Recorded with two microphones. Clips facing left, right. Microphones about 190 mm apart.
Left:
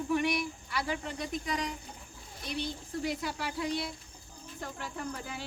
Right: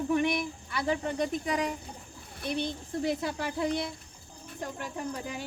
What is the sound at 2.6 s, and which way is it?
Speech, 25° right (ahead or behind).